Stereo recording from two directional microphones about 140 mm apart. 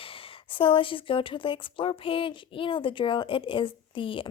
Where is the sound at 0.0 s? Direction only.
40° left (ahead or behind).